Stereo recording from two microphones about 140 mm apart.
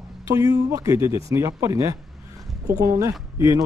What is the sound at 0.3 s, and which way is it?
A man's voice, 20° right (ahead or behind).